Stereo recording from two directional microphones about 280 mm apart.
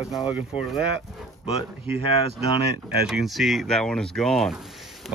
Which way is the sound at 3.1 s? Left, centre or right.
Centre.